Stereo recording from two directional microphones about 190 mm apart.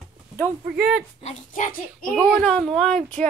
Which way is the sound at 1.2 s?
45° left (ahead or behind).